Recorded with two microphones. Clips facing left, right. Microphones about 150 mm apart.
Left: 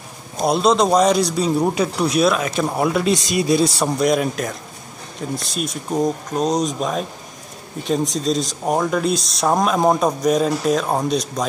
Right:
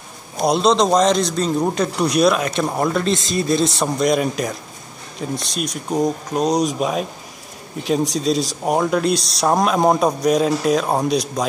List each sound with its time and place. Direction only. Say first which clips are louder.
0.4 s a man's voice: even; 5° left (ahead or behind)